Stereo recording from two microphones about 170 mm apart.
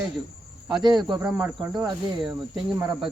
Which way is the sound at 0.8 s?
25° right (ahead or behind).